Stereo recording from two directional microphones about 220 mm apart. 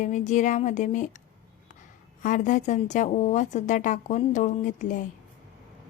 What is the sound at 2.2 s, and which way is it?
Speech, 35° left (ahead or behind).